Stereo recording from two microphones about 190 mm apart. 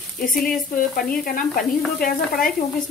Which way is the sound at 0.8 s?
50° left (ahead or behind).